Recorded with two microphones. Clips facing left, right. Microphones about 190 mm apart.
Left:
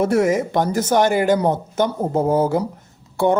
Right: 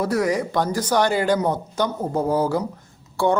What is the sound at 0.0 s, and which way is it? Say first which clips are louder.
A man's voice: left 4 dB; 25° left (ahead or behind).